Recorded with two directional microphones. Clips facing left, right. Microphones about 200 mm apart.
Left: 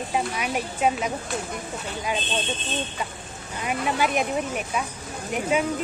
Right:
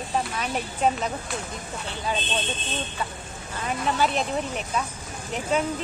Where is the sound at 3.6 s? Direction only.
10° left (ahead or behind).